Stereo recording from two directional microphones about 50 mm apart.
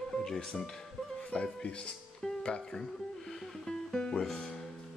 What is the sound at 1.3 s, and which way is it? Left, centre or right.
Speech, left.